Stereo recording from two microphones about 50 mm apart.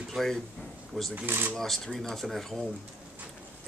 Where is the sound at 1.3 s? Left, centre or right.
Right.